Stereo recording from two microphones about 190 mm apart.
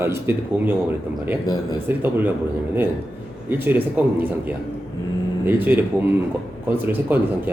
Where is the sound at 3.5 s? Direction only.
10° right (ahead or behind).